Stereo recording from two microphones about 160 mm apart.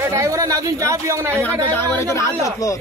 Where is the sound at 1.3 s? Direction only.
10° left (ahead or behind).